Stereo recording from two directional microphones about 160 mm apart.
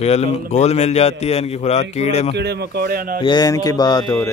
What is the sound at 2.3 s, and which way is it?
Speech, 90° right.